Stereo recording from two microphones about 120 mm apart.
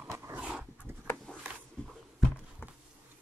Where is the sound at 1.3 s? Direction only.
10° left (ahead or behind).